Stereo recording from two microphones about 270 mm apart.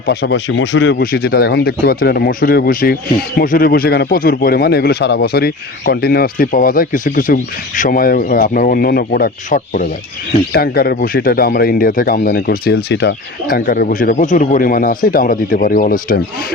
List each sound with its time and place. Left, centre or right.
0.0 s speech: left